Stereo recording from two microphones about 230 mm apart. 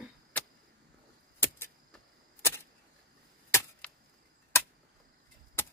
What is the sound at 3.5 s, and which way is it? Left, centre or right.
Arrow, centre.